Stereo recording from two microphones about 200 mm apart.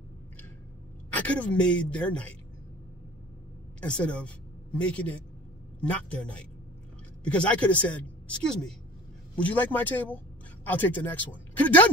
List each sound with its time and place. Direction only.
1.1 s speech: 5° left (ahead or behind)
3.8 s a woman's voice: 5° left (ahead or behind)
7.2 s a woman's voice: 5° left (ahead or behind)